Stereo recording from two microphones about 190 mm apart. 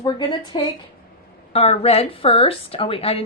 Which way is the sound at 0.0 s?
25° left (ahead or behind).